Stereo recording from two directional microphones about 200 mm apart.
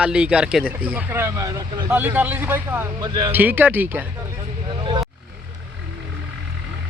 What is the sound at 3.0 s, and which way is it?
Speech, 20° right (ahead or behind).